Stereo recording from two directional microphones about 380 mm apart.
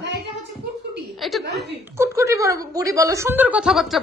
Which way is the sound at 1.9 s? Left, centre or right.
Centre.